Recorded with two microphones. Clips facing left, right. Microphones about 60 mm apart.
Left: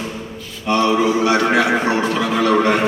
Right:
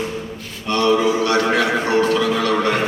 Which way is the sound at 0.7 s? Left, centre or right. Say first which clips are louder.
Left 1 dB; centre.